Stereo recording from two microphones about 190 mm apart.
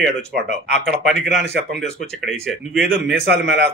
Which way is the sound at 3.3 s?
70° right (ahead or behind).